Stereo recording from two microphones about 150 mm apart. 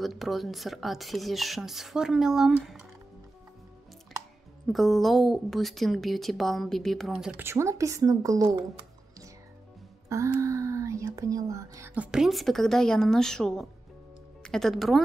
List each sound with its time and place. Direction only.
0.0 s speech: centre (ahead or behind)
4.6 s speech: centre (ahead or behind)
7.4 s a woman's voice: 20° right (ahead or behind)
10.0 s speech: 20° right (ahead or behind); by 15.0 s centre (ahead or behind)